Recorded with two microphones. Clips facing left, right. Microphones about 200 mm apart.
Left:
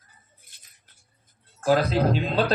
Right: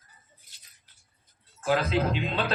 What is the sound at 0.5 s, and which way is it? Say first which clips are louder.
Rodents: left 2 dB; 55° left (ahead or behind).